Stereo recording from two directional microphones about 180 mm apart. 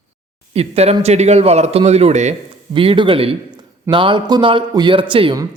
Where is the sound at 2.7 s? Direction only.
30° right (ahead or behind).